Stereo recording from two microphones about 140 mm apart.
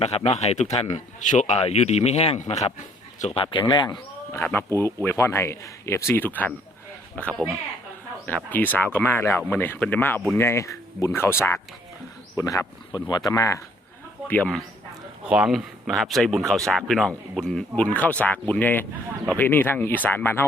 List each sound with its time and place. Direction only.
0.0 s speech: 50° left (ahead or behind)
3.4 s speech: 35° left (ahead or behind)
4.3 s speech: 15° left (ahead or behind)
8.4 s speech: 10° left (ahead or behind)
14.3 s speech: 10° left (ahead or behind)
15.3 s speech: 5° right (ahead or behind); by 20.4 s 15° left (ahead or behind)